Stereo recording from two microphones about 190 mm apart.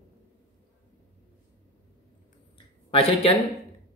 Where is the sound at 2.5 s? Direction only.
30° left (ahead or behind).